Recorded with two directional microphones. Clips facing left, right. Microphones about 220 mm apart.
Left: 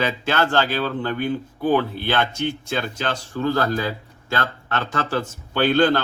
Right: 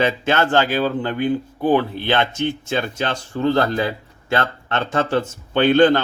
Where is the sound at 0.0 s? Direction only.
20° right (ahead or behind).